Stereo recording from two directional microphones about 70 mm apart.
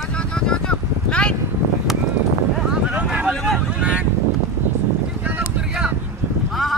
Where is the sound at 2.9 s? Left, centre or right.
Centre.